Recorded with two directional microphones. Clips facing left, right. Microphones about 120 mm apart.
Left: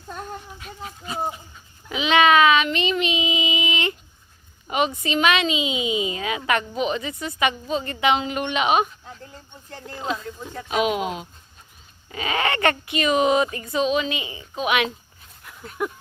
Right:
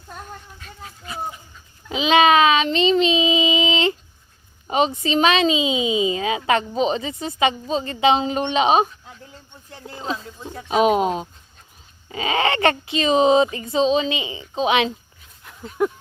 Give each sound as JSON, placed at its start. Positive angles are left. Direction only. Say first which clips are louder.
{"t": 0.6, "sound": "speech", "louder": "left 3 dB", "side_deg": 25}
{"t": 1.9, "sound": "child singing", "louder": "right 2 dB", "side_deg": -25}
{"t": 4.7, "sound": "a woman's voice", "louder": "right 3 dB", "side_deg": -25}
{"t": 12.0, "sound": "a woman's voice", "louder": "right 3 dB", "side_deg": -25}
{"t": 15.4, "sound": "dog", "louder": "right 6 dB", "side_deg": -25}